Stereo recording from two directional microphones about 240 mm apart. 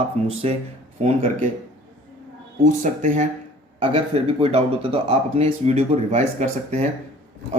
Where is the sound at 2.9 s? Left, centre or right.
Right.